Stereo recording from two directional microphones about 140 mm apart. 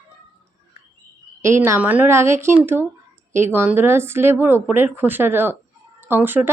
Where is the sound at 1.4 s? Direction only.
20° right (ahead or behind).